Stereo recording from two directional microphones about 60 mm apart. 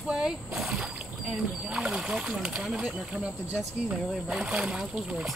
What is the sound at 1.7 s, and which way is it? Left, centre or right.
Speech, centre.